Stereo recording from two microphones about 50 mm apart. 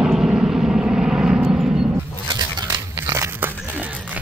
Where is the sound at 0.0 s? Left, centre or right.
Centre.